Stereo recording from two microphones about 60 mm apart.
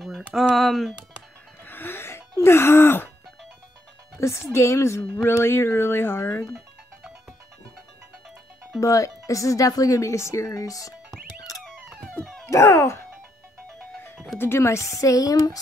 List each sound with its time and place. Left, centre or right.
0.3 s speech: centre
1.6 s music: left
4.2 s speech: left
8.7 s speech: left
10.5 s speech: left
12.4 s speech: left
14.4 s speech: left